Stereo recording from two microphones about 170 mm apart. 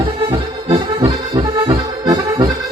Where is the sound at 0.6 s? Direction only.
30° right (ahead or behind).